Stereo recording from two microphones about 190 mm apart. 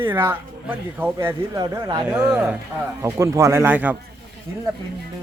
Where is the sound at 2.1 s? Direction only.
10° right (ahead or behind).